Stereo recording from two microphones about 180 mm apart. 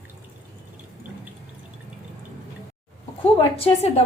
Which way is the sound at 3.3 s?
35° left (ahead or behind).